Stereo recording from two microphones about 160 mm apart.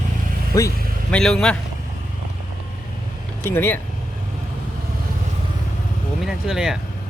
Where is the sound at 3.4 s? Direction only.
15° left (ahead or behind).